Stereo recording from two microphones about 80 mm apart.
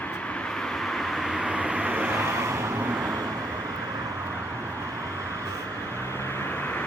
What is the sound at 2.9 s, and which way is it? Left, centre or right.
Vehicle, centre.